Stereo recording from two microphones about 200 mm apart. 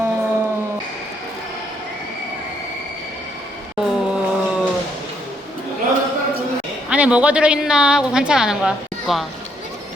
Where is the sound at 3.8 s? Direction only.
Centre (ahead or behind).